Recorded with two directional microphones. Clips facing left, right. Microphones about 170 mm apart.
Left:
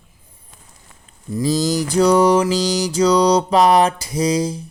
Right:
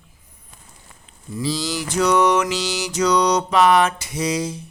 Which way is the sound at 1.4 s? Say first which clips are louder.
Left 6 dB; 45° left (ahead or behind).